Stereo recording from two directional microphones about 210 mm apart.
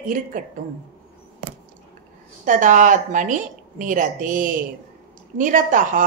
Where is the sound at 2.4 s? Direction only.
35° right (ahead or behind).